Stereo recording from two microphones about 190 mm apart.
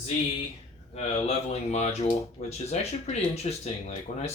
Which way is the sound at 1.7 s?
35° left (ahead or behind).